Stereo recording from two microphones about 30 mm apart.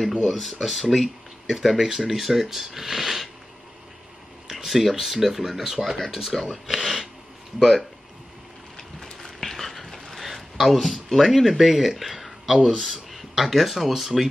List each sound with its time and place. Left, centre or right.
0.3 s speech: centre
1.8 s speech: centre
4.5 s speech: centre
8.7 s a sound: centre
10.2 s a sound: centre
10.8 s speech: centre
11.1 s speech: centre
13.4 s speech: centre